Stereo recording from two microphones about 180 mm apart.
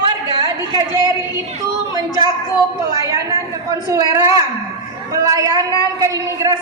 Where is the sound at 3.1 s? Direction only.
15° right (ahead or behind).